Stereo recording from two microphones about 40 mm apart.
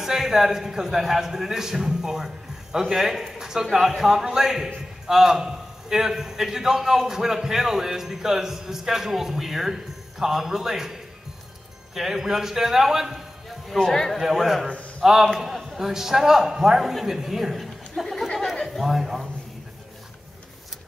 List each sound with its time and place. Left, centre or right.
0.0 s a man's voice: centre
3.3 s a sound: centre
3.7 s a man's voice: centre
13.7 s a man's voice: centre
14.1 s a man's voice: centre
18.8 s a man's voice: centre